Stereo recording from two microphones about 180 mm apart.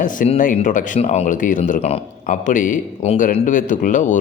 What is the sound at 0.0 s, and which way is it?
Speech, 50° left (ahead or behind).